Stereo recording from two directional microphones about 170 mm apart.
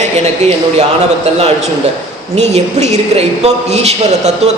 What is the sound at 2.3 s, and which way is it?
A man's voice, 40° right (ahead or behind).